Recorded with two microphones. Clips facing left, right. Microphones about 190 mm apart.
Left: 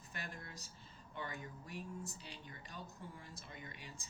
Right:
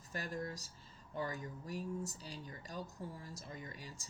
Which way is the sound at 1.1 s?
40° right (ahead or behind).